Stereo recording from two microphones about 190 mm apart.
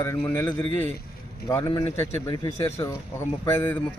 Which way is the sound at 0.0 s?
10° left (ahead or behind).